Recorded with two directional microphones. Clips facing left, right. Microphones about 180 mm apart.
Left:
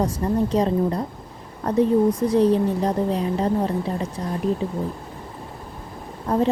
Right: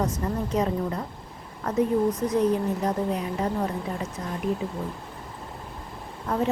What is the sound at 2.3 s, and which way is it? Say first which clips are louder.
A woman's voice: left 5 dB; 30° left (ahead or behind).